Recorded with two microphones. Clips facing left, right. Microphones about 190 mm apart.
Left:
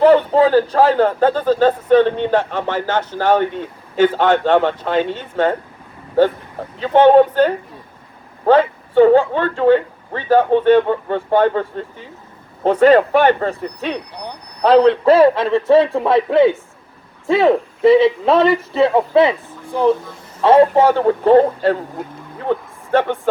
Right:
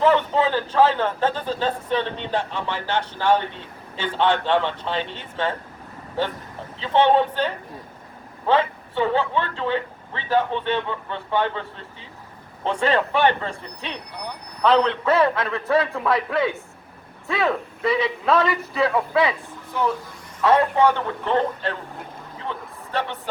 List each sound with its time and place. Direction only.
0.0 s a man's voice: 40° left (ahead or behind)
6.7 s a man's voice: 45° left (ahead or behind); by 19.3 s 25° left (ahead or behind)
20.4 s a man's voice: 30° left (ahead or behind); by 23.3 s 50° left (ahead or behind)